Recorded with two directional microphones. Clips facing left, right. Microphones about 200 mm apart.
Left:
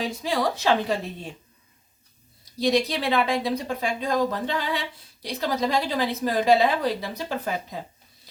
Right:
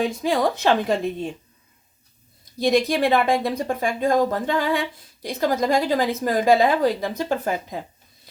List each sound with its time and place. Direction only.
0.0 s speech: 50° right (ahead or behind)
2.4 s speech: 50° right (ahead or behind)